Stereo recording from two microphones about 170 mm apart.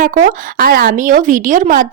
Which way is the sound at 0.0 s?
50° right (ahead or behind).